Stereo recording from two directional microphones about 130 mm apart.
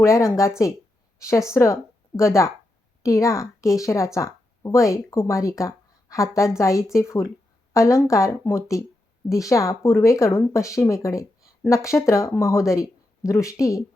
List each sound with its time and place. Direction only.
0.0 s a woman's voice: 20° left (ahead or behind)